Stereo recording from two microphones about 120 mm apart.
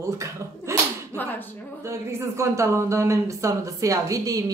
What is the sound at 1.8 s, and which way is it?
Speech, 25° right (ahead or behind).